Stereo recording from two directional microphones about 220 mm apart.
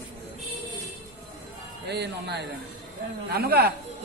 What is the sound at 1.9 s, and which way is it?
A man's voice, 50° right (ahead or behind).